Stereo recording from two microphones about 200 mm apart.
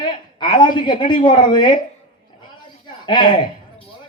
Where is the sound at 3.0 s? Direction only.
20° left (ahead or behind).